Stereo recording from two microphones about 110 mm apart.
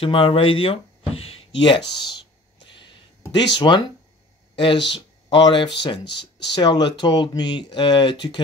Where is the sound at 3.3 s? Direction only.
45° left (ahead or behind).